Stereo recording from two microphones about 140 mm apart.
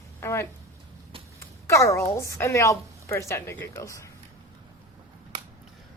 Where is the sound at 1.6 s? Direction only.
20° left (ahead or behind).